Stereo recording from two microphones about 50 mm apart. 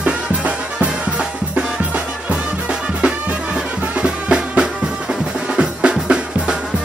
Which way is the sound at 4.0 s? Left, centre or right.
Centre.